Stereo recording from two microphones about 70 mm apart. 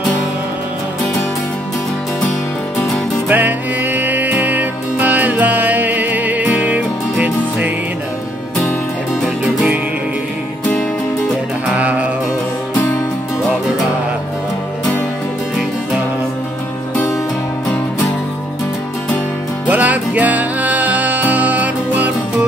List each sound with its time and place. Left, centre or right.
3.3 s music: right
11.7 s music: centre
19.7 s music: right